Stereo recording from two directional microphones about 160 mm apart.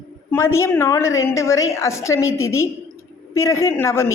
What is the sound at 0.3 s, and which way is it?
A woman's voice, 15° left (ahead or behind).